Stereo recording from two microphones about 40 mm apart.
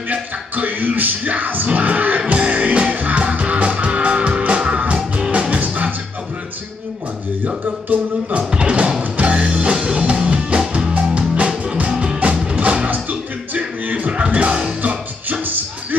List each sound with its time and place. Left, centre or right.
0.1 s music: right
5.6 s music: right
7.4 s music: right
8.5 s music: right
13.5 s music: right
13.9 s music: right
15.4 s music: right